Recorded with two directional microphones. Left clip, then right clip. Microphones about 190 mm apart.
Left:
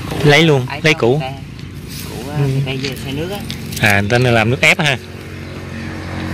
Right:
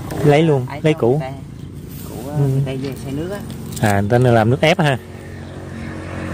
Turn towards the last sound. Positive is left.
turn(degrees=-30)  # may be behind; listen again after turning